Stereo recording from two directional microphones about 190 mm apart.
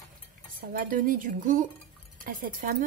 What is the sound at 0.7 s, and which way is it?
Speech, 45° right (ahead or behind).